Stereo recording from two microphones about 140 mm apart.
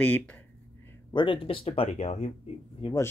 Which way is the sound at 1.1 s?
40° left (ahead or behind).